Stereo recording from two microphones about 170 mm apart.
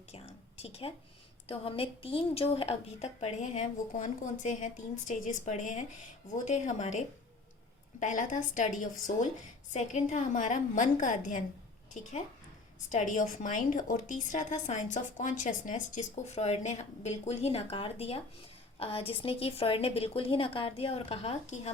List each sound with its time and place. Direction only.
0.1 s a sound: 35° left (ahead or behind)
1.5 s a woman's voice: 35° left (ahead or behind)
12.9 s a woman's voice: 45° left (ahead or behind)